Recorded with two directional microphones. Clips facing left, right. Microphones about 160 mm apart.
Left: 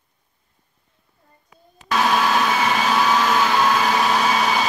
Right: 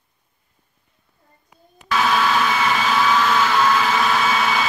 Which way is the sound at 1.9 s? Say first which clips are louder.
Even; 40° left (ahead or behind).